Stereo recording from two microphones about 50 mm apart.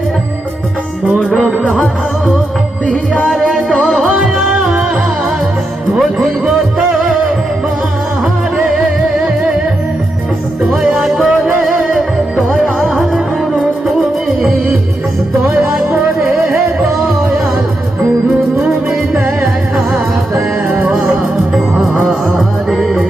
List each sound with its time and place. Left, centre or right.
1.5 s music: right
2.8 s music: left
3.2 s music: centre
4.5 s music: right
6.0 s music: centre
8.2 s music: centre
10.7 s music: centre
12.9 s music: centre
16.2 s music: centre
18.6 s music: centre